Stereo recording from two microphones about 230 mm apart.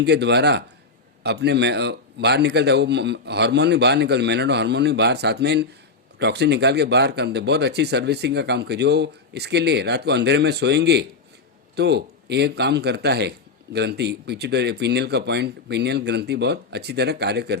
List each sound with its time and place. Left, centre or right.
0.0 s speech: right